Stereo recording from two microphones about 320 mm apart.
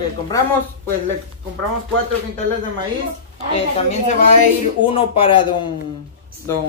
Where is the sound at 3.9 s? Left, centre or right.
Left.